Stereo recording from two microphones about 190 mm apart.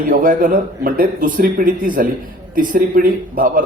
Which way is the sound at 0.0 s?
45° right (ahead or behind).